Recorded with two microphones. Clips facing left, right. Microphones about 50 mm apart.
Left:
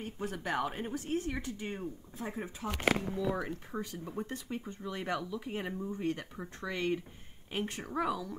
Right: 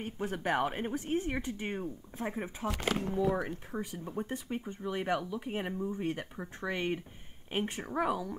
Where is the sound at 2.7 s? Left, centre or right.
Left.